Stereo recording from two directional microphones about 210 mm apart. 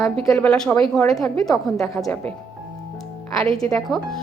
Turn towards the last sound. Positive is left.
turn(degrees=0)  # may be behind; listen again after turning